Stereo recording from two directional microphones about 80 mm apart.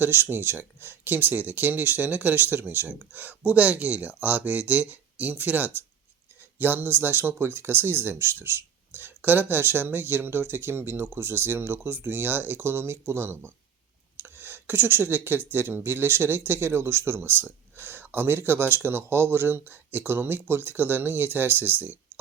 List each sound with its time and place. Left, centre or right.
0.0 s speech: right
14.2 s a sound: right
15.5 s speech: right